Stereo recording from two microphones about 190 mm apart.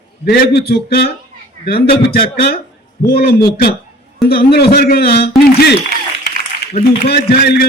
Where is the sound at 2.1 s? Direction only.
50° left (ahead or behind).